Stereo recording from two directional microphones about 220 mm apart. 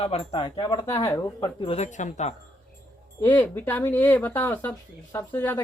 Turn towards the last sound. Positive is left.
turn(degrees=10)  # may be behind; listen again after turning